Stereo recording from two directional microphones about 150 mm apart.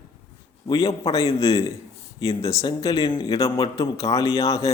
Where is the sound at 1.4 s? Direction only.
20° left (ahead or behind).